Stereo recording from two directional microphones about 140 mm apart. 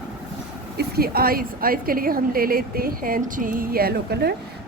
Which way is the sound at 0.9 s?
90° right.